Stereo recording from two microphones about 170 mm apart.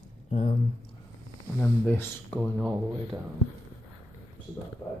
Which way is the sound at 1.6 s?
10° left (ahead or behind).